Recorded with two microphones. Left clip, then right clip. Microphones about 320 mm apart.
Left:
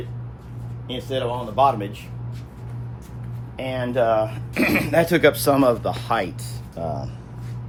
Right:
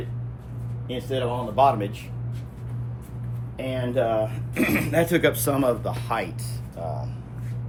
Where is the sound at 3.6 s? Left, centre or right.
Centre.